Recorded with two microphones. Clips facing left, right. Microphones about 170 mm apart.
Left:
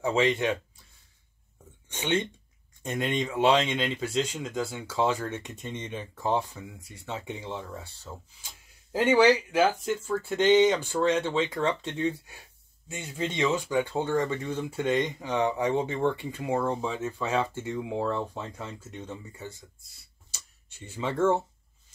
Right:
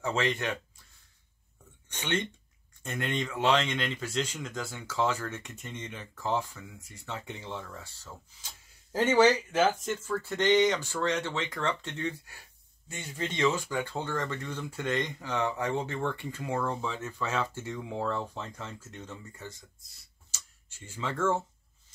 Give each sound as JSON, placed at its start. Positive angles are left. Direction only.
{"t": 0.0, "sound": "speech", "side_deg": 15}
{"t": 1.9, "sound": "speech", "side_deg": 15}
{"t": 20.9, "sound": "speech", "side_deg": 20}